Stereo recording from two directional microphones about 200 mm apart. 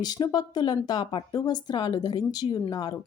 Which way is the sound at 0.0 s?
20° left (ahead or behind).